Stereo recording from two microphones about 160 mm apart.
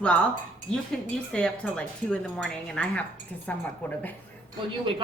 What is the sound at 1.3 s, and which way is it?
A woman's voice, 5° left (ahead or behind).